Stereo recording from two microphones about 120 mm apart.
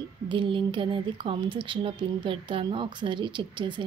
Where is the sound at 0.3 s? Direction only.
45° right (ahead or behind).